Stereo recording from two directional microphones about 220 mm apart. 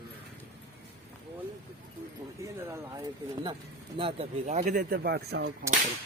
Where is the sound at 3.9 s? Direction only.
30° right (ahead or behind); by 5.5 s 50° right (ahead or behind).